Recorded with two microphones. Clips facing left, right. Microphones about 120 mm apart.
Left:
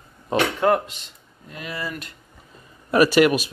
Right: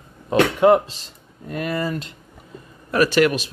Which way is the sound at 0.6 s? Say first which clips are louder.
Right 6 dB; 20° right (ahead or behind).